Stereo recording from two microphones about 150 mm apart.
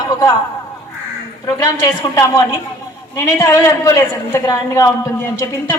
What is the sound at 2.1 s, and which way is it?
A man's voice, 20° left (ahead or behind).